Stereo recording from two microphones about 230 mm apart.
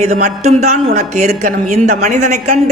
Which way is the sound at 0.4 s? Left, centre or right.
Right.